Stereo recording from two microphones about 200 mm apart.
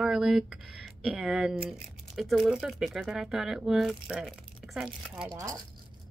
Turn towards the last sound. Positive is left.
turn(degrees=-20)  # may be behind; listen again after turning